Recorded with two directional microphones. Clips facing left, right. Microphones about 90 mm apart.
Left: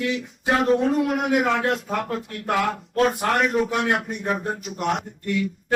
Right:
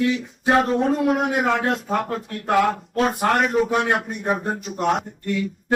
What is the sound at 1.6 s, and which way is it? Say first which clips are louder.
Speech: right 1 dB; 25° right (ahead or behind).